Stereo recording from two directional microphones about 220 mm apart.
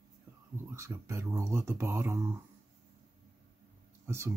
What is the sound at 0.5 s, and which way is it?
Speech, 10° right (ahead or behind).